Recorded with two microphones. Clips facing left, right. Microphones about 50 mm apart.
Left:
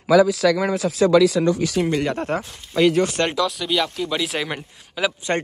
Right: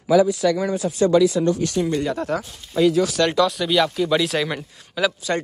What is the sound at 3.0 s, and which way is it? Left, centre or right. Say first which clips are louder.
Speech: right 1 dB; left.